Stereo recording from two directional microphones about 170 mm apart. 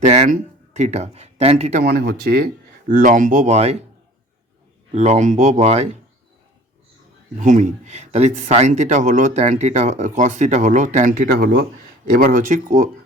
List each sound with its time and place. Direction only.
0.1 s speech: 45° right (ahead or behind)
1.8 s speech: 60° right (ahead or behind); by 3.8 s 40° right (ahead or behind)
4.9 s speech: 45° right (ahead or behind)
7.3 s speech: 45° right (ahead or behind)